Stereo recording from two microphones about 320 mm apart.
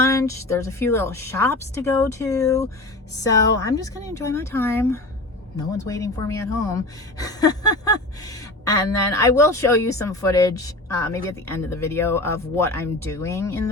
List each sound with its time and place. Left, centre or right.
0.0 s a woman's voice: centre